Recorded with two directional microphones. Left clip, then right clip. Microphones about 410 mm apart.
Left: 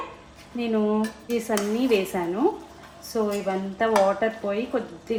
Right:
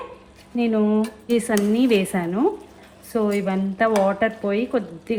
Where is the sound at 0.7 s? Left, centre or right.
Right.